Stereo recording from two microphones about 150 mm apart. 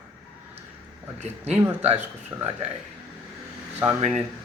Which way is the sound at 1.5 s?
10° right (ahead or behind).